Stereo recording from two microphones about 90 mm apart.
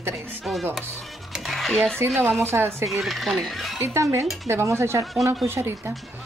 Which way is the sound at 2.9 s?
Centre (ahead or behind).